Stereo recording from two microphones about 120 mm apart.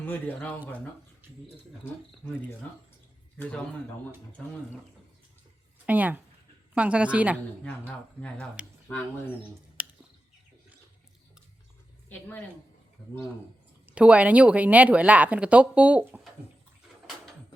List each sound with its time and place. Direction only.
0.0 s speech: 15° left (ahead or behind)
3.3 s speech: 10° left (ahead or behind)
5.8 s speech: 15° right (ahead or behind)
7.6 s speech: 10° left (ahead or behind)
9.8 s a sound: 10° right (ahead or behind)
13.8 s speech: 10° right (ahead or behind)